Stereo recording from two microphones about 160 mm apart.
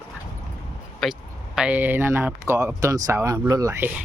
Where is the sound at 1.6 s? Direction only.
10° right (ahead or behind).